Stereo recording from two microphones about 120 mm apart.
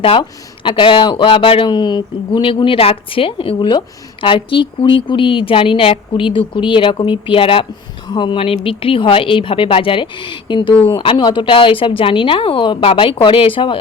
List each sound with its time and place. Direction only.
0.0 s speech: 45° left (ahead or behind)